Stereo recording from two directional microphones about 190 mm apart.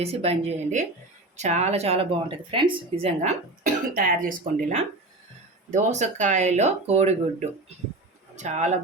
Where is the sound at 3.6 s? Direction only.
45° right (ahead or behind).